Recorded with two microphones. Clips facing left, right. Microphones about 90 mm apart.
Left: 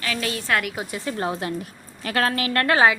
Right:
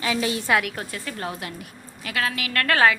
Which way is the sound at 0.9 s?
20° left (ahead or behind).